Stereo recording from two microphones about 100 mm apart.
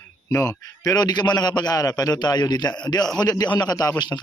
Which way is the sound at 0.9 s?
45° left (ahead or behind).